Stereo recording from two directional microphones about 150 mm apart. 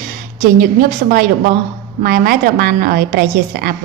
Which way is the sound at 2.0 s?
90° right.